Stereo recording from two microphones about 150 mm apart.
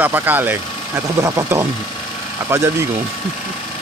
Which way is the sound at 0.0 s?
10° right (ahead or behind).